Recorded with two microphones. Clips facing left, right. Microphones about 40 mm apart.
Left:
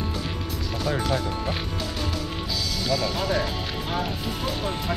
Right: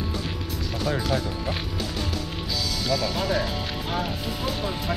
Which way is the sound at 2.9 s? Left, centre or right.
Centre.